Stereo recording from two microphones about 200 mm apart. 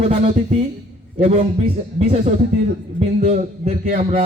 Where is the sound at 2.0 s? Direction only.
35° right (ahead or behind).